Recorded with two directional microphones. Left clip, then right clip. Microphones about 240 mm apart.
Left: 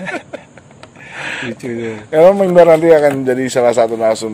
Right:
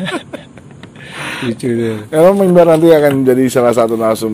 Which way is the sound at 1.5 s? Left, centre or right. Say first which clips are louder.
Right 6 dB; right.